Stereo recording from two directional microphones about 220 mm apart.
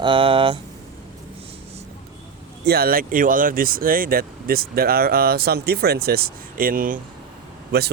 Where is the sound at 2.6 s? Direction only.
45° right (ahead or behind).